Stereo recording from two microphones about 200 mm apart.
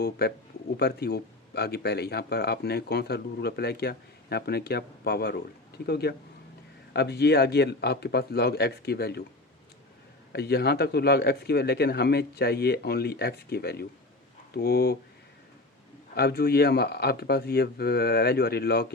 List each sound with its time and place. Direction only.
0.0 s speech: 50° left (ahead or behind)
10.3 s speech: 55° left (ahead or behind)
16.1 s speech: 50° left (ahead or behind)